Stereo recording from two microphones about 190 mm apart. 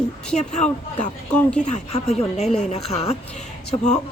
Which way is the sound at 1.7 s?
35° left (ahead or behind).